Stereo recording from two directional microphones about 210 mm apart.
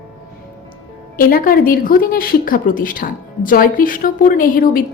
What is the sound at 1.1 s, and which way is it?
A woman's voice, 45° left (ahead or behind).